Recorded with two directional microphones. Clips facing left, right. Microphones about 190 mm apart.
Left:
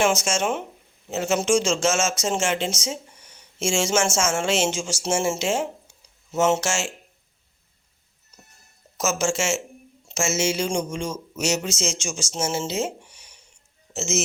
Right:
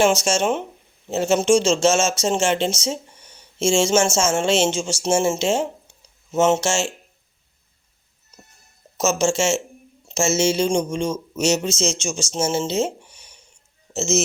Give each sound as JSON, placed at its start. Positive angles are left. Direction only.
{"t": 0.0, "sound": "speech", "side_deg": -30}
{"t": 9.0, "sound": "speech", "side_deg": -25}
{"t": 13.1, "sound": "a sound", "side_deg": -30}
{"t": 13.9, "sound": "speech", "side_deg": -30}